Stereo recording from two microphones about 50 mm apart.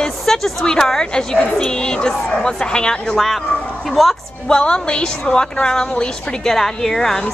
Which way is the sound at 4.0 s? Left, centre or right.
Centre.